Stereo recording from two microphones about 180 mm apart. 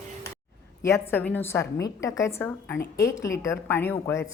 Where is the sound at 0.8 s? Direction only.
15° left (ahead or behind).